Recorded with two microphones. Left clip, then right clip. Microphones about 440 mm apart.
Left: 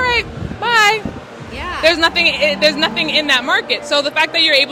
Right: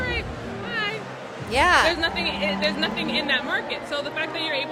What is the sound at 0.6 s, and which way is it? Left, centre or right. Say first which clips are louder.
Speech: left 16 dB; left.